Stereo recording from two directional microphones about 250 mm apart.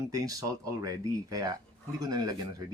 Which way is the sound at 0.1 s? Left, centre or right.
Centre.